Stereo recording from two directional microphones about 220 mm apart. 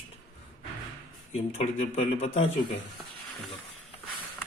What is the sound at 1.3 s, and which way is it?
A man's voice, 30° left (ahead or behind).